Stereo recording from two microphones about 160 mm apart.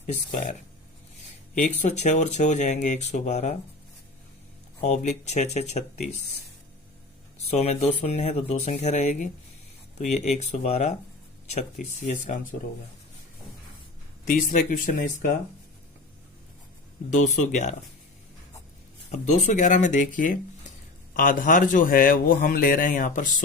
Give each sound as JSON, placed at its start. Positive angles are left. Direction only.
{"t": 0.0, "sound": "speech", "side_deg": 45}
{"t": 1.5, "sound": "speech", "side_deg": 50}
{"t": 4.8, "sound": "speech", "side_deg": 45}
{"t": 7.3, "sound": "speech", "side_deg": 45}
{"t": 14.3, "sound": "speech", "side_deg": 55}
{"t": 17.1, "sound": "speech", "side_deg": 50}
{"t": 19.1, "sound": "speech", "side_deg": 45}